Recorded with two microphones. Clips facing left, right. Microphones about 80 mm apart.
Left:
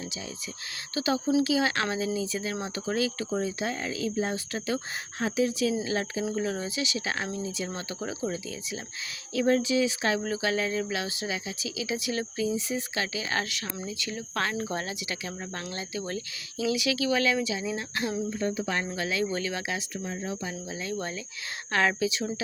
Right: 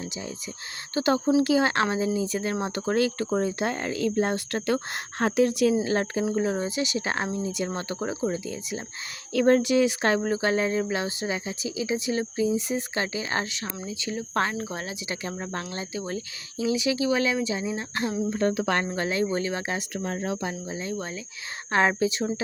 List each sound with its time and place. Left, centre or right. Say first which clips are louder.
0.9 s speech: right 4 dB; right
2.2 s speech: right 4 dB; right
5.7 s speech: right 5 dB; right
6.2 s speech: right 4 dB; right
6.7 s speech: right 4 dB; right
9.3 s speech: right 4 dB; right
10.2 s speech: right 4 dB; right
12.5 s speech: right 3 dB; right
14.5 s speech: left 1 dB; centre
15.1 s speech: right 4 dB; right
18.3 s speech: right 5 dB; right
18.9 s speech: right 3 dB; right
20.1 s speech: right 5 dB; right
20.5 s speech: right 2 dB; right